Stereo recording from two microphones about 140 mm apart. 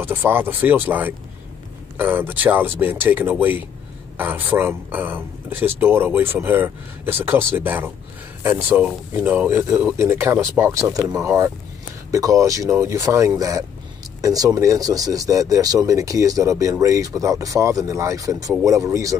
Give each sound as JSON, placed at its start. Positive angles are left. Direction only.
{"t": 0.0, "sound": "speech", "side_deg": -15}